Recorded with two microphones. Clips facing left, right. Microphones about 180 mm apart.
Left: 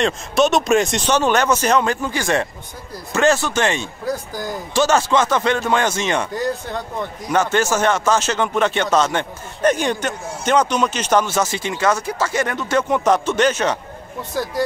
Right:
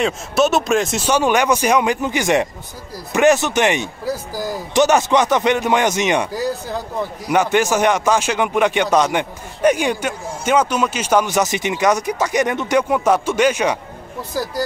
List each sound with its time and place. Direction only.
0.0 s speech: 5° right (ahead or behind)
4.0 s speech: 5° right (ahead or behind)
4.7 s speech: 15° right (ahead or behind)
6.3 s speech: 5° right (ahead or behind)
14.3 s speech: centre (ahead or behind)